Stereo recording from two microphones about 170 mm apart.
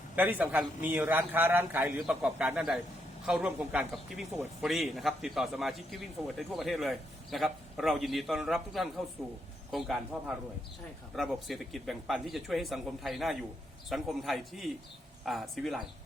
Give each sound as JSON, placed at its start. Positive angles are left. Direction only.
{"t": 0.2, "sound": "a man's voice", "side_deg": -10}
{"t": 11.1, "sound": "a man's voice", "side_deg": 0}